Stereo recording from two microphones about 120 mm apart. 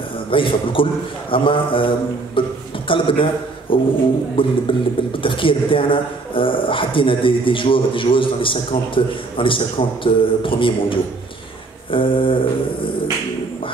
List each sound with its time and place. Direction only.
0.3 s speech: 45° left (ahead or behind)